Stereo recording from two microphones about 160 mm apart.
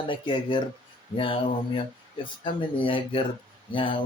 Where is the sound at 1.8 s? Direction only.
35° left (ahead or behind).